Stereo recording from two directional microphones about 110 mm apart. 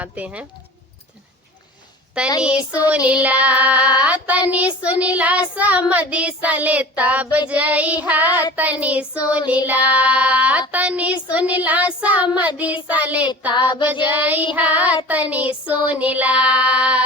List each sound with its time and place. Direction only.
0.0 s speech: 10° right (ahead or behind)
2.4 s child singing: 10° right (ahead or behind)
13.5 s child singing: 40° left (ahead or behind)
13.8 s child singing: 15° right (ahead or behind)